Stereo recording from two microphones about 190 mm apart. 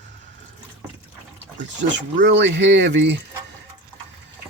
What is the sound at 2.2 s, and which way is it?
Speech, 70° right (ahead or behind).